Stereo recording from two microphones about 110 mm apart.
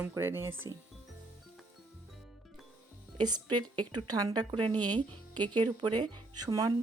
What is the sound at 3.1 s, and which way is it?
Speech, 40° right (ahead or behind).